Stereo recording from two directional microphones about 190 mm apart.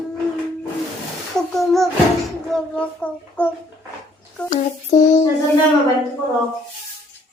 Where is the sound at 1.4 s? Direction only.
Centre (ahead or behind).